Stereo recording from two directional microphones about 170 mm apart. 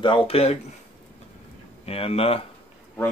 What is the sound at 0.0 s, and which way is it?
Speech, 35° left (ahead or behind).